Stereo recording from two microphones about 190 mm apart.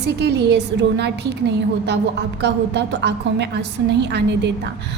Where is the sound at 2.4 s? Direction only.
65° right (ahead or behind).